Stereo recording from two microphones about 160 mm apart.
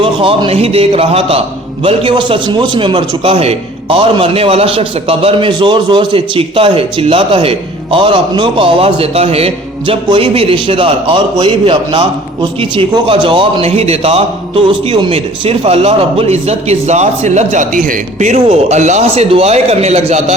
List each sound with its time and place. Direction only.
0.0 s a man's voice: 35° right (ahead or behind)